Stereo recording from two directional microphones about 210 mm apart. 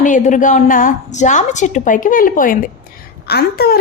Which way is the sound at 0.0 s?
35° left (ahead or behind).